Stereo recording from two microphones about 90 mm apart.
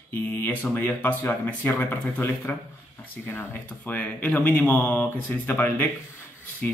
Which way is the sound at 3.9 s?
20° left (ahead or behind).